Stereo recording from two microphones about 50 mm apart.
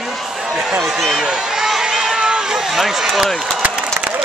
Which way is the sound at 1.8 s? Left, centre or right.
Centre.